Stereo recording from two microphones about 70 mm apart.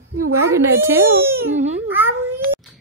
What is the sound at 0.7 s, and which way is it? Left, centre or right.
Speech, right.